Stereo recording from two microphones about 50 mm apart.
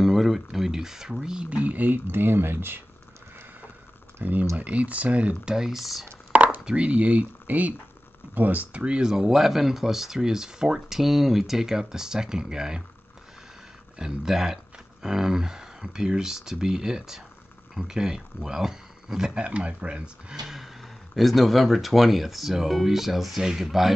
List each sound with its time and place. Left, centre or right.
0.0 s speech: centre
1.5 s speech: right
2.0 s speech: right
4.2 s speech: right
5.5 s speech: centre
6.3 s chopping: right
6.6 s speech: right
13.9 s speech: centre
19.4 s speech: right
20.4 s speech: centre